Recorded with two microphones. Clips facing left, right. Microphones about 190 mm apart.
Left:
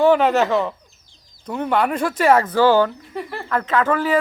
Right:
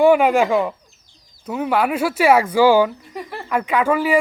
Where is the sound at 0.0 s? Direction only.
10° right (ahead or behind).